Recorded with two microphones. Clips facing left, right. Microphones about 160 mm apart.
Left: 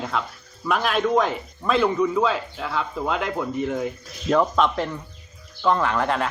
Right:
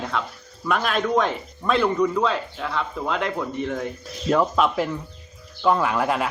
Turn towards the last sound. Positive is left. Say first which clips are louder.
# even
turn(degrees=-10)  # may be behind; listen again after turning